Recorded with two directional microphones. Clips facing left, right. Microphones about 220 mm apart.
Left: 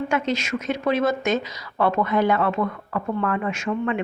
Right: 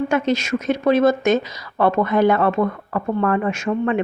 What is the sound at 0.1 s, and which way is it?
Speech, 40° right (ahead or behind).